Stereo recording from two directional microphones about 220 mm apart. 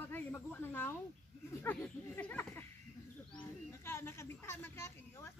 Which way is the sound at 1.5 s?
10° left (ahead or behind).